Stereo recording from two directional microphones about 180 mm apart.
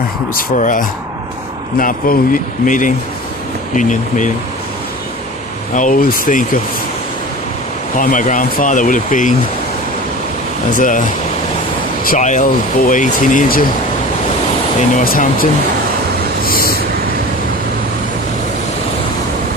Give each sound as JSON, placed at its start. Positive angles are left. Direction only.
{"t": 0.5, "sound": "speech", "side_deg": 45}
{"t": 5.7, "sound": "speech", "side_deg": 45}
{"t": 7.9, "sound": "speech", "side_deg": 45}
{"t": 10.8, "sound": "speech", "side_deg": 45}
{"t": 12.0, "sound": "speech", "side_deg": 45}
{"t": 14.9, "sound": "speech", "side_deg": 50}
{"t": 16.5, "sound": "vehicle", "side_deg": 55}